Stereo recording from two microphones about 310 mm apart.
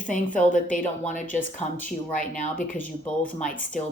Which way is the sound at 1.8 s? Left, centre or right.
Left.